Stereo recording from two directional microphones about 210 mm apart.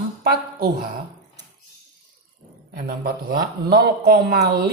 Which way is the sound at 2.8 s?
45° right (ahead or behind).